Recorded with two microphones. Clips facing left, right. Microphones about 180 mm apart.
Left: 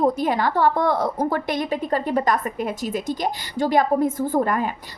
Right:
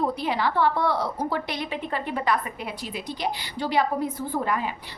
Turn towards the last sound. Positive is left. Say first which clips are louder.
# left 6 dB
turn(degrees=45)  # may be behind; listen again after turning